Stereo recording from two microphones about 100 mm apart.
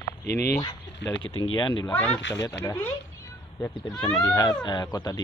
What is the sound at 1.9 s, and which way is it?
Speech, 15° left (ahead or behind).